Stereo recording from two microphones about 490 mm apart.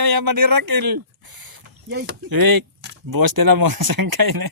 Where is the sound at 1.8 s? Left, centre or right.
Centre.